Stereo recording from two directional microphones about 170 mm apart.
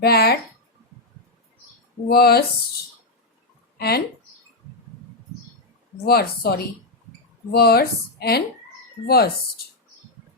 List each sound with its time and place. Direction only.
0.0 s speech: 70° left (ahead or behind)
2.0 s speech: 65° left (ahead or behind)
3.8 s speech: 70° left (ahead or behind)
6.1 s speech: 65° left (ahead or behind)
7.5 s speech: 70° left (ahead or behind)